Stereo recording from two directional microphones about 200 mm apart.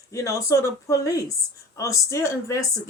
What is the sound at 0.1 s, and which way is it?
Speech, 15° left (ahead or behind).